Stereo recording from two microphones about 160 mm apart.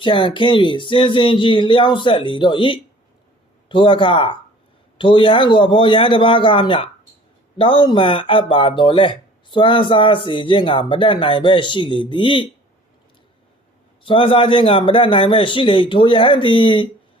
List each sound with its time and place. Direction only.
0.0 s speech: 30° left (ahead or behind)
14.0 s speech: 35° left (ahead or behind)